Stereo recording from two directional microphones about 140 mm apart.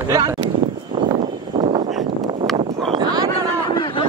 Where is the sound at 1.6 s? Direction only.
55° right (ahead or behind).